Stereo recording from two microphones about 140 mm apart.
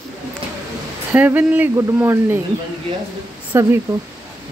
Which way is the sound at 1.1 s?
10° right (ahead or behind).